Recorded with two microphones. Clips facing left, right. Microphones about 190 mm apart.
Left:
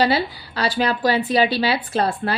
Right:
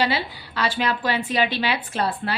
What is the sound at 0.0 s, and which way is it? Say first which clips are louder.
Speech: left 5 dB; 40° left (ahead or behind).